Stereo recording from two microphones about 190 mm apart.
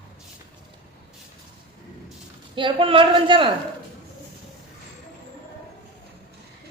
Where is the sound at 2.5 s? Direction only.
25° right (ahead or behind).